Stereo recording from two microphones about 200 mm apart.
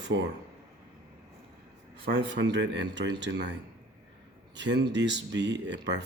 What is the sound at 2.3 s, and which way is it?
Speech, 60° right (ahead or behind).